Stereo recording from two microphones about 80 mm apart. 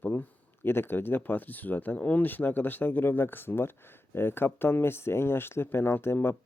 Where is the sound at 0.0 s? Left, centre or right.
Left.